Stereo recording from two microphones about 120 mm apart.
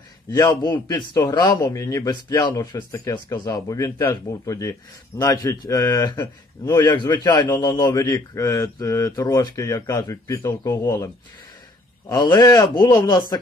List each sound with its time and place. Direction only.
0.3 s speech: 35° left (ahead or behind)
6.1 s speech: 25° left (ahead or behind)
6.8 s speech: 35° left (ahead or behind)
12.3 s speech: 35° left (ahead or behind)